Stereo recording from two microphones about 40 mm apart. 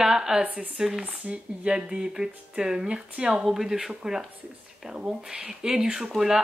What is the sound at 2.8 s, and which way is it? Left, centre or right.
Speech, right.